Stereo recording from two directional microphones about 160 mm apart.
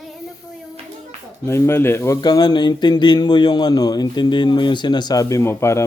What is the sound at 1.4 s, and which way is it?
A man's voice, 15° left (ahead or behind).